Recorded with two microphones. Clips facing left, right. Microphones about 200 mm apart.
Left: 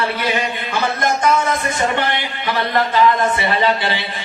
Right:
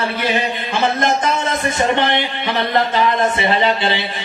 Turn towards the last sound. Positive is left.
turn(degrees=-20)  # may be behind; listen again after turning